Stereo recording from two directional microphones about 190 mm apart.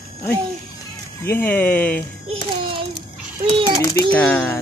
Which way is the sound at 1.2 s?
10° left (ahead or behind).